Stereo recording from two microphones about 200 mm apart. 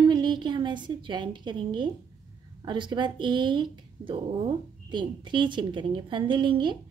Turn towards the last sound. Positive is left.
turn(degrees=-25)  # may be behind; listen again after turning